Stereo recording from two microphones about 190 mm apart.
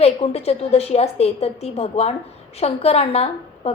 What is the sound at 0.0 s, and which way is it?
A woman's voice, 30° left (ahead or behind).